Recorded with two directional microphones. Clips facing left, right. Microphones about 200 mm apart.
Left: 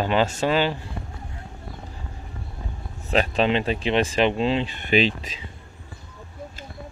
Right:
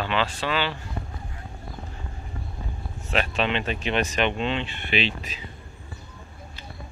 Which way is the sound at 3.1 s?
35° left (ahead or behind).